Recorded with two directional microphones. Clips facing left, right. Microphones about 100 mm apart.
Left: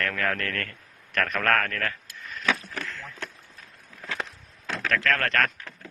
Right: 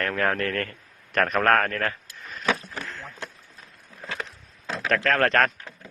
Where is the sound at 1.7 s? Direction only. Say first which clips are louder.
Right 3 dB; 30° right (ahead or behind).